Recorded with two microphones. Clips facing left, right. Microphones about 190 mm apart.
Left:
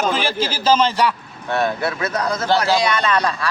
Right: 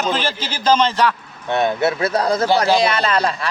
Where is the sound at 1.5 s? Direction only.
20° right (ahead or behind).